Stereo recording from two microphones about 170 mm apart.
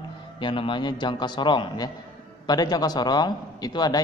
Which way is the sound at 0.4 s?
30° left (ahead or behind).